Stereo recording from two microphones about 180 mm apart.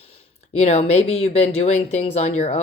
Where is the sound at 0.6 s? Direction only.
35° left (ahead or behind).